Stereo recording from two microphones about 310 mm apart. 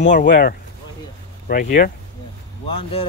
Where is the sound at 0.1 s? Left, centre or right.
Left.